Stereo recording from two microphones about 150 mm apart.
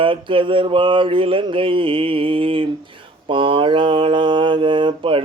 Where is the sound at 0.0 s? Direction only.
35° right (ahead or behind).